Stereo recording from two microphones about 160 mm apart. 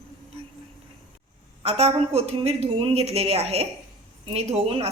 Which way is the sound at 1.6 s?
40° right (ahead or behind).